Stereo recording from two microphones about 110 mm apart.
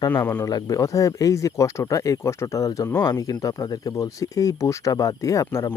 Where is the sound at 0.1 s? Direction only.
20° left (ahead or behind).